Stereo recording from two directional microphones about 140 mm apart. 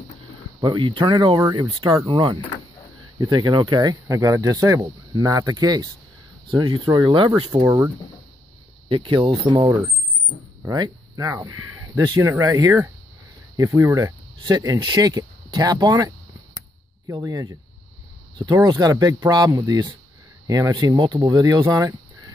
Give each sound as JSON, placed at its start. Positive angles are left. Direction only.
{"t": 0.6, "sound": "speech", "side_deg": -35}
{"t": 7.6, "sound": "speech", "side_deg": -25}
{"t": 8.8, "sound": "speech", "side_deg": -40}
{"t": 10.6, "sound": "speech", "side_deg": -25}
{"t": 17.1, "sound": "speech", "side_deg": -25}